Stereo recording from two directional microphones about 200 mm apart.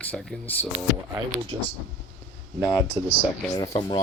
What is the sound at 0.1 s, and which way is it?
Speech, 5° left (ahead or behind).